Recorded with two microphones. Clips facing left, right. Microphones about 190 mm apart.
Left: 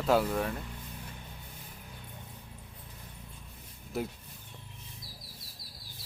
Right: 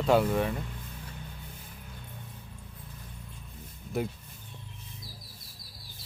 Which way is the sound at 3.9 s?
Centre (ahead or behind).